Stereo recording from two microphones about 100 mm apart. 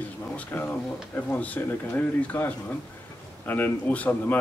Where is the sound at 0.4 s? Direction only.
20° left (ahead or behind).